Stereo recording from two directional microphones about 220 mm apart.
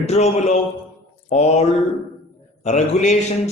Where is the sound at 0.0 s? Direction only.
30° left (ahead or behind).